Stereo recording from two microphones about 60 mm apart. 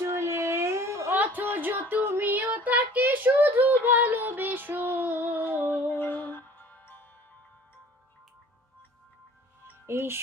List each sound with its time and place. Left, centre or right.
0.0 s a sound: right
1.1 s child singing: right
5.7 s music: left
9.8 s speech: right